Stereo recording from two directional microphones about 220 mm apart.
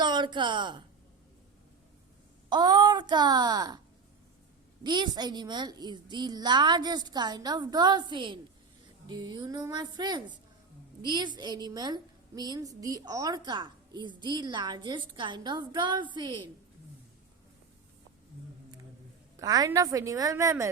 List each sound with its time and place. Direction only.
0.0 s speech: 20° right (ahead or behind)
2.5 s a woman's voice: 20° right (ahead or behind)
4.8 s a woman's voice: 20° right (ahead or behind)
19.4 s a woman's voice: 15° right (ahead or behind)